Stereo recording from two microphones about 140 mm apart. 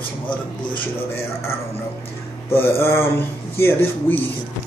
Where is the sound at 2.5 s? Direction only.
15° left (ahead or behind).